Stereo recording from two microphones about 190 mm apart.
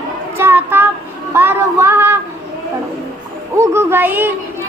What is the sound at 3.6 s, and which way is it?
Speech, 15° right (ahead or behind).